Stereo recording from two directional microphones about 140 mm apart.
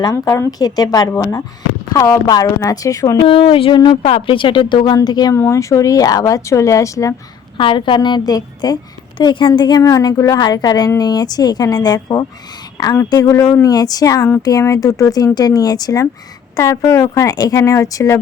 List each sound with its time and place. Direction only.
0.0 s a woman's voice: 25° left (ahead or behind)
3.2 s a woman's voice: 40° left (ahead or behind); by 7.1 s 20° left (ahead or behind)
7.5 s a woman's voice: 35° left (ahead or behind)